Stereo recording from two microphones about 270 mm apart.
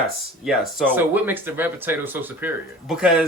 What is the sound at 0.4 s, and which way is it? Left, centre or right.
Speech, centre.